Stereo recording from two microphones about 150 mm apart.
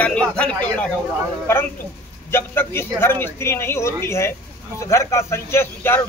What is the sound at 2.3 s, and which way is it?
A man's voice, 15° left (ahead or behind).